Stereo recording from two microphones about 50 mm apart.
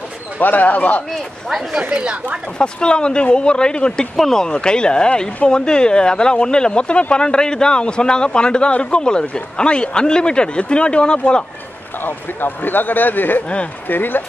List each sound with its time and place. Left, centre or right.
0.4 s speech: left
1.8 s speech: centre
2.6 s speech: centre
12.0 s speech: left